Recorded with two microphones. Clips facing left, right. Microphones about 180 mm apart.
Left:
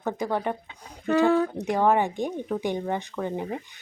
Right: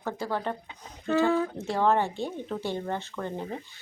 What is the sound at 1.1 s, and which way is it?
Speech, 70° left (ahead or behind).